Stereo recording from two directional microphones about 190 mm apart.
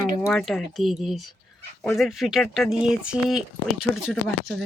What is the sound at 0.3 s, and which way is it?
Speech, 5° left (ahead or behind).